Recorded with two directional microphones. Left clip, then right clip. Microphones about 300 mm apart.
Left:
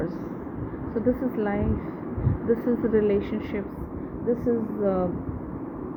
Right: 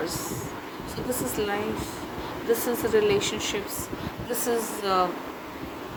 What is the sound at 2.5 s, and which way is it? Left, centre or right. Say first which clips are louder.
Speech: even; centre.